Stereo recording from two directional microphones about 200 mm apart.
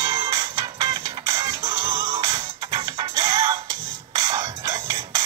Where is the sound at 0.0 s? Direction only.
20° right (ahead or behind).